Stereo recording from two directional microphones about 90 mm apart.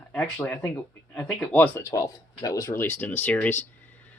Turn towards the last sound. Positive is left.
turn(degrees=20)  # may be behind; listen again after turning